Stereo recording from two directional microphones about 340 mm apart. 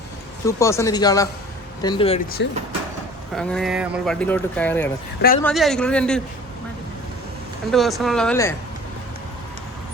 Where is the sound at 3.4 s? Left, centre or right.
Centre.